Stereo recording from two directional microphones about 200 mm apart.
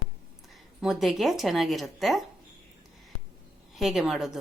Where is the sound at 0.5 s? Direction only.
Centre (ahead or behind).